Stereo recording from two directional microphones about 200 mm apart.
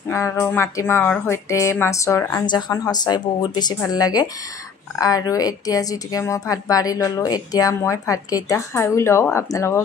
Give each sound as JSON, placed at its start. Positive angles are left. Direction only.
{"t": 0.1, "sound": "a woman's voice", "side_deg": 15}